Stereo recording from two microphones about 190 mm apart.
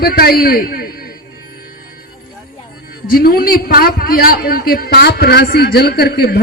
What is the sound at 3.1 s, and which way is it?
A man's voice, 50° left (ahead or behind).